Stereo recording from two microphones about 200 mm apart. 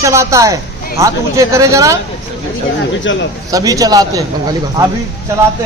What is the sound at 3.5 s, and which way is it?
Speech, 15° right (ahead or behind).